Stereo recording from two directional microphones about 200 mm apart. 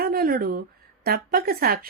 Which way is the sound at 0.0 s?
45° right (ahead or behind).